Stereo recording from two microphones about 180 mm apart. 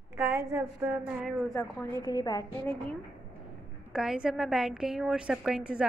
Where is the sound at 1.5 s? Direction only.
15° left (ahead or behind).